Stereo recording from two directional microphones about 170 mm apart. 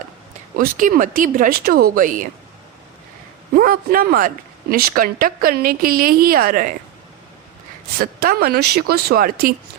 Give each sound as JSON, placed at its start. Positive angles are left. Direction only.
{"t": 0.5, "sound": "speech", "side_deg": -55}
{"t": 3.5, "sound": "a woman's voice", "side_deg": -60}
{"t": 7.9, "sound": "a woman's voice", "side_deg": -60}